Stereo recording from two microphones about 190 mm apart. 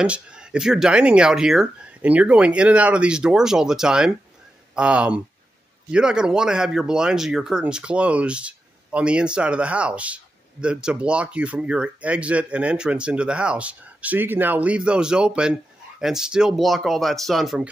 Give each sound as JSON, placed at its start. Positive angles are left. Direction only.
{"t": 0.0, "sound": "speech", "side_deg": -5}